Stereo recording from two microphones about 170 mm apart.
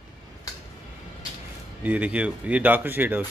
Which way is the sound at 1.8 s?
10° right (ahead or behind).